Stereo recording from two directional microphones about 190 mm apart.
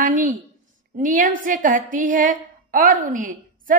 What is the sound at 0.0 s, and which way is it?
A woman's voice, 45° right (ahead or behind).